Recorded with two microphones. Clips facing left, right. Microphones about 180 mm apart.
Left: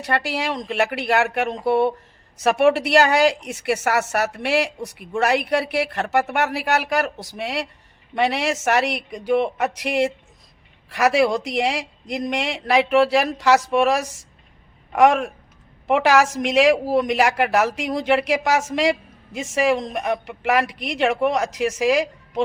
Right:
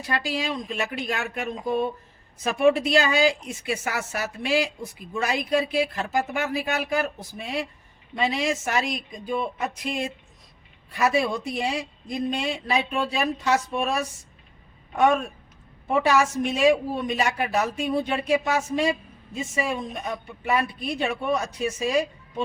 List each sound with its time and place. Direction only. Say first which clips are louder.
0.0 s a woman's voice: left 4 dB; 70° left (ahead or behind); by 22.4 s 90° left